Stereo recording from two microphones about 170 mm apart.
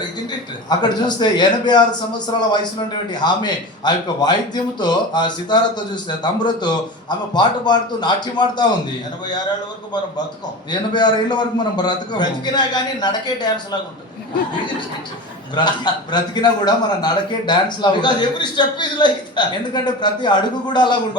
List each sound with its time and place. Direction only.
0.3 s a man's voice: 25° left (ahead or behind)
10.7 s a man's voice: 25° left (ahead or behind)
15.5 s a man's voice: 25° left (ahead or behind)